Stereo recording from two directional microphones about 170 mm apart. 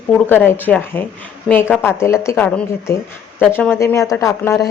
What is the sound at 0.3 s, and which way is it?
Speech, 10° left (ahead or behind).